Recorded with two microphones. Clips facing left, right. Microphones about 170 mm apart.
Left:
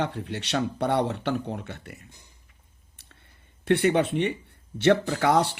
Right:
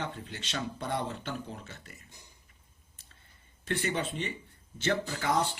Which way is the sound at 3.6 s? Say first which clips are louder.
Left 11 dB; 65° left (ahead or behind).